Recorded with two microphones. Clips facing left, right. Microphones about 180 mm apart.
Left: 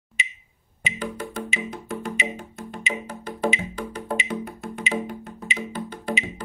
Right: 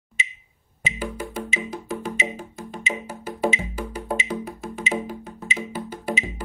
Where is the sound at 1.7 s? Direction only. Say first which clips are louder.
Right 1 dB; centre (ahead or behind).